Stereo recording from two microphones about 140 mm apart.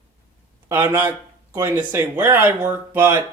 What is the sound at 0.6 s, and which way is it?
Speech, 15° right (ahead or behind).